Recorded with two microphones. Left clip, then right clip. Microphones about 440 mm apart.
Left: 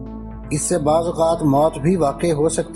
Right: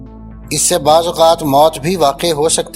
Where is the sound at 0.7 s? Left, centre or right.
Right.